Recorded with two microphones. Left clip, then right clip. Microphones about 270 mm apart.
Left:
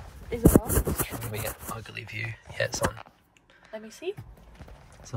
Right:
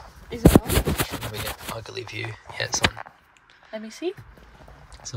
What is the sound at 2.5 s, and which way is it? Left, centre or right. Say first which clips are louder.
Speech: right 2 dB; centre.